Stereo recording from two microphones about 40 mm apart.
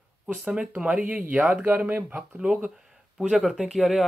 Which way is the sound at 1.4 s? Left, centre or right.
Right.